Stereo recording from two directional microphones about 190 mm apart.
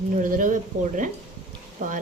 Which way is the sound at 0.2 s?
45° right (ahead or behind).